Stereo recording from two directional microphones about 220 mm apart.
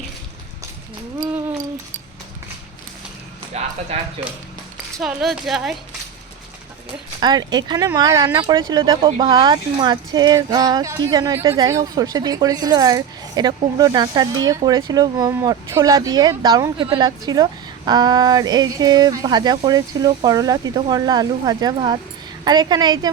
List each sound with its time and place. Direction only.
3.5 s speech: 30° right (ahead or behind)
4.9 s a woman's voice: centre (ahead or behind)
7.2 s speech: 20° right (ahead or behind)